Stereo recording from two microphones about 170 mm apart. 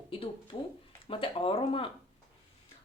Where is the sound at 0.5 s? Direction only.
30° left (ahead or behind).